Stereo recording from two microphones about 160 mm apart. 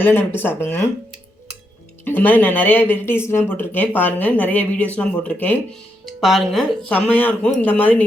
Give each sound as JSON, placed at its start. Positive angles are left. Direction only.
{"t": 0.0, "sound": "speech", "side_deg": 10}
{"t": 2.0, "sound": "speech", "side_deg": 10}